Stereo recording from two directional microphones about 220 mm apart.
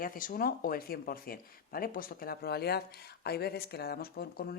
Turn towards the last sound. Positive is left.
turn(degrees=45)  # may be behind; listen again after turning